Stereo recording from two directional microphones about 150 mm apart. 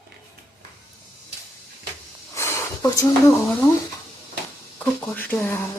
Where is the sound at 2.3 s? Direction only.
20° left (ahead or behind).